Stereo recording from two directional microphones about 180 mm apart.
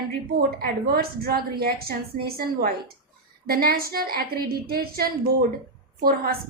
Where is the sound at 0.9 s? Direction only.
60° right (ahead or behind).